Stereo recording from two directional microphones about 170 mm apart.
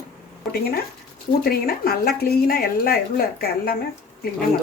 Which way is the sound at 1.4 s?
65° left (ahead or behind).